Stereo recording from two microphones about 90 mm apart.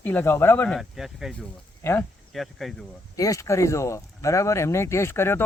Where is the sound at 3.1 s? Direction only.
35° left (ahead or behind).